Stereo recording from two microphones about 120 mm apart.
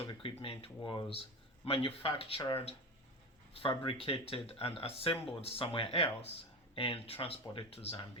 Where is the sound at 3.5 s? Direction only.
50° left (ahead or behind).